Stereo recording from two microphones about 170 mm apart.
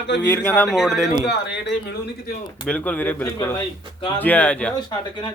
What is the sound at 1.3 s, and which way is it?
Speech, 80° left.